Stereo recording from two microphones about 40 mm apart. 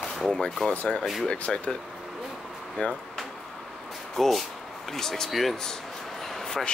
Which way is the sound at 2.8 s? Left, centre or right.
Left.